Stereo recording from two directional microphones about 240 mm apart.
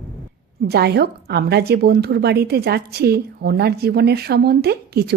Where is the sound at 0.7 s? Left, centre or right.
Right.